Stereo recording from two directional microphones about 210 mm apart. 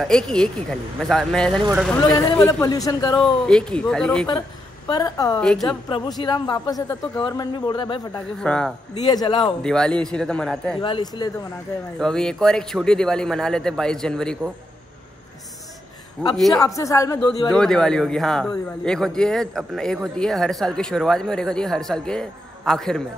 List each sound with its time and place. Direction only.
0.0 s speech: 5° left (ahead or behind)
2.0 s speech: 20° left (ahead or behind)
3.4 s speech: 5° left (ahead or behind)
4.8 s speech: 20° left (ahead or behind)
8.4 s speech: 5° left (ahead or behind)
9.0 s speech: 20° left (ahead or behind)
9.4 s speech: 5° left (ahead or behind)
10.8 s speech: 20° left (ahead or behind)
12.0 s speech: 5° left (ahead or behind)
16.2 s speech: 5° left (ahead or behind)
16.5 s speech: 15° left (ahead or behind)
17.5 s speech: 5° left (ahead or behind)